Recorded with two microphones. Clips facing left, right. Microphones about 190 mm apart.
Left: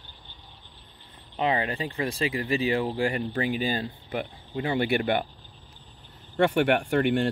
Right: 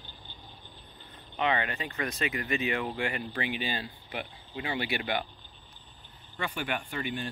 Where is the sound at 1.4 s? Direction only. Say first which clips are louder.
Left 4 dB; 30° left (ahead or behind); by 5.3 s 50° left (ahead or behind).